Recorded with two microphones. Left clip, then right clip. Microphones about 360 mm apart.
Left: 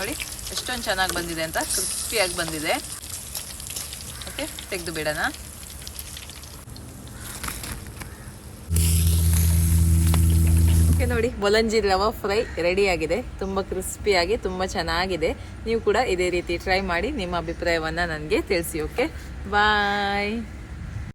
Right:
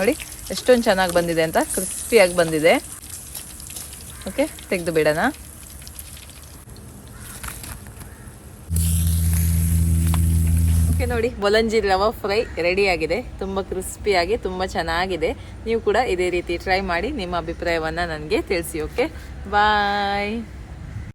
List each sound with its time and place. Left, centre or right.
0.5 s speech: centre
4.4 s speech: centre
7.4 s a sound: centre